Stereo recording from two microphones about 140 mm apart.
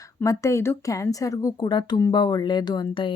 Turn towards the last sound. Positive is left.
turn(degrees=35)  # may be behind; listen again after turning